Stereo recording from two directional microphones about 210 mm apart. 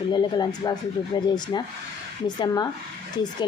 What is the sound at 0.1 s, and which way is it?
Speech, 20° left (ahead or behind).